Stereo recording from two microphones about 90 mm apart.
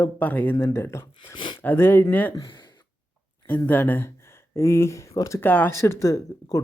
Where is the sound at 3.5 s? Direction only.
20° left (ahead or behind); by 5.4 s 35° left (ahead or behind).